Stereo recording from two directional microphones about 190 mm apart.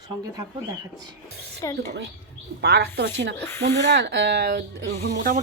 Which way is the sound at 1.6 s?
15° left (ahead or behind).